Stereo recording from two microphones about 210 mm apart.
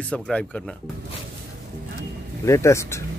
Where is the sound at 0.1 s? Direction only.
5° left (ahead or behind).